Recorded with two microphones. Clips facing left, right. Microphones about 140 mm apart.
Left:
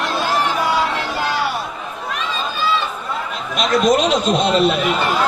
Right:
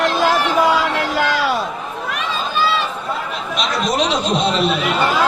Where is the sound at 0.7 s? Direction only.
90° right.